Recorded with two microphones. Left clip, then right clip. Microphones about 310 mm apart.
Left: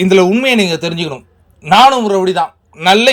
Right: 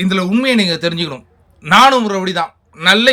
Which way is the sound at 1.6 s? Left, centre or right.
Right.